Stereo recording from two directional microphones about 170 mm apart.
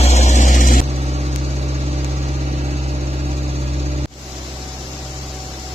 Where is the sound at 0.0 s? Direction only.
40° left (ahead or behind).